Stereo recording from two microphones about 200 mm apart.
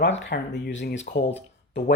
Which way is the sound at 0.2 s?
55° left (ahead or behind).